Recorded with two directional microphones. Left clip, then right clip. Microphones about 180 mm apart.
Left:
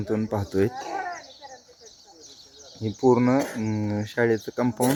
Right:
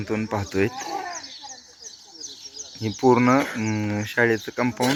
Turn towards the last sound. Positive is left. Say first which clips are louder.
# right 1 dB
turn(degrees=15)  # may be behind; listen again after turning